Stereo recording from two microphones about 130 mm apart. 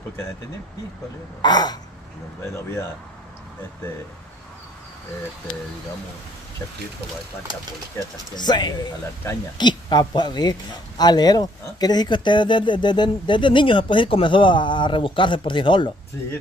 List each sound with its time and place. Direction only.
1.4 s speech: 30° left (ahead or behind)
2.5 s speech: 20° left (ahead or behind)
8.4 s speech: 35° left (ahead or behind)